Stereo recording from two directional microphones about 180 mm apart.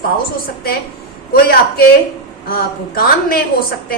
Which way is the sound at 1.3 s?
60° left (ahead or behind).